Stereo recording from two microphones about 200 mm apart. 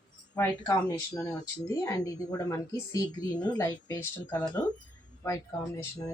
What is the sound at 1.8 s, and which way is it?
A woman's voice, 15° left (ahead or behind).